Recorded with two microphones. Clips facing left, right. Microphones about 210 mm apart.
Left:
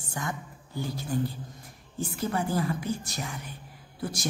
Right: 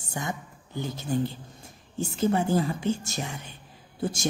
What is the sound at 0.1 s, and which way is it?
A woman's voice, 20° right (ahead or behind).